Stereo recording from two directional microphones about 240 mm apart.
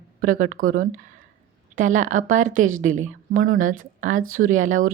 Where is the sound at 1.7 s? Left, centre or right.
Right.